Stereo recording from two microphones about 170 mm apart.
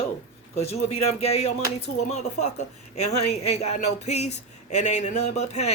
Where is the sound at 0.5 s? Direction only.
40° left (ahead or behind).